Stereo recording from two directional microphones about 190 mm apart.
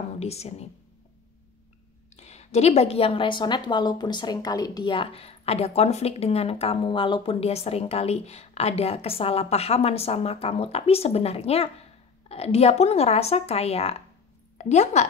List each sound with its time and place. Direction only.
0.2 s a woman's voice: 35° left (ahead or behind)
2.1 s a woman's voice: 35° left (ahead or behind)